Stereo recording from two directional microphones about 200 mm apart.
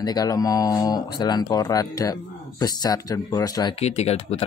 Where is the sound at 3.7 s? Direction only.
30° left (ahead or behind).